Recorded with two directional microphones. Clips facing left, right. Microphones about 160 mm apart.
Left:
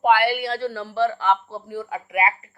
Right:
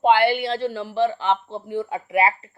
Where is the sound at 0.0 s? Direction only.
25° right (ahead or behind).